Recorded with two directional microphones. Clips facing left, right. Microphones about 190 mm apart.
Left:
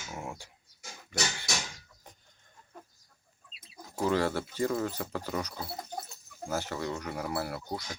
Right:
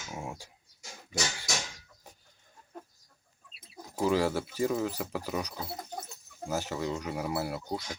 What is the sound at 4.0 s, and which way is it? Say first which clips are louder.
Speech: right 1 dB; 10° right (ahead or behind).